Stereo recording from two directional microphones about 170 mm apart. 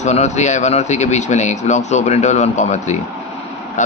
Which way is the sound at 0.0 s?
45° left (ahead or behind).